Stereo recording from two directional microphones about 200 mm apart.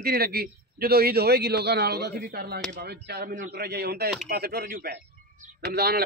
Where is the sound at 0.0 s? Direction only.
50° right (ahead or behind).